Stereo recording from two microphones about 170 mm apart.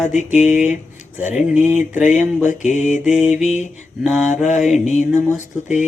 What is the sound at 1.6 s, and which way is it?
Speech, 10° right (ahead or behind).